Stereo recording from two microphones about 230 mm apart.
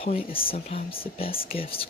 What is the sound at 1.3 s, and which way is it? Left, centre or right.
Speech, left.